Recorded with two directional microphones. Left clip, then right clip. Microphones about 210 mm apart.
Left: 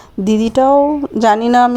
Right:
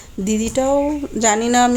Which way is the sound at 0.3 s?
30° left (ahead or behind).